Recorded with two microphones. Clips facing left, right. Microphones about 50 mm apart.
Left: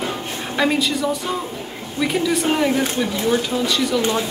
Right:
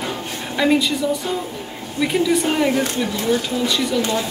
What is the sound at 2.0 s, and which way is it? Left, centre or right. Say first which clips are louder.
Speech: right 1 dB; centre.